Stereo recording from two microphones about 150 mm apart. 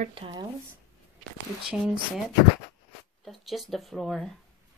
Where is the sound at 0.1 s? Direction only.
30° right (ahead or behind).